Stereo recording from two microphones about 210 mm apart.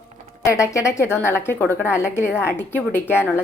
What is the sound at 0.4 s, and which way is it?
A woman's voice, 15° left (ahead or behind).